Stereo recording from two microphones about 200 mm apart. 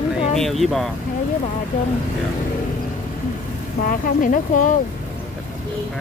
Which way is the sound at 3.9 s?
40° left (ahead or behind).